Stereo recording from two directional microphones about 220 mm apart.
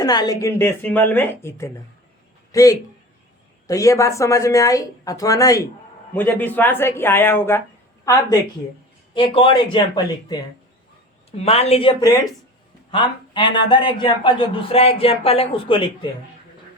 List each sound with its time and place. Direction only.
0.0 s a man's voice: 15° left (ahead or behind)